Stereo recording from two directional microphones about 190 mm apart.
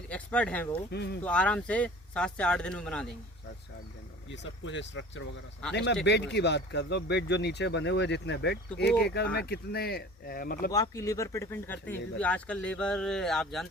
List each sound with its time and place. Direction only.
0.1 s speech: 5° left (ahead or behind)
4.3 s speech: 75° left (ahead or behind); by 10.7 s 50° left (ahead or behind)
10.7 s speech: 15° left (ahead or behind); by 13.7 s centre (ahead or behind)